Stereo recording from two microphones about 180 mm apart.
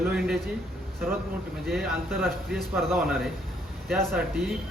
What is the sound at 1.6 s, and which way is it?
A man's voice, centre (ahead or behind).